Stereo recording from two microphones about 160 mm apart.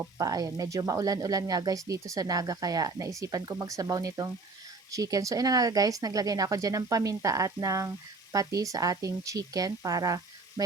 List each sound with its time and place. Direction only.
0.0 s speech: 20° right (ahead or behind)